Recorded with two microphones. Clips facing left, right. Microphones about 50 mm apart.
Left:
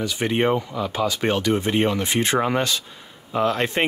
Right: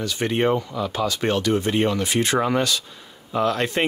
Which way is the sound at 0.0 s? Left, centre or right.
Centre.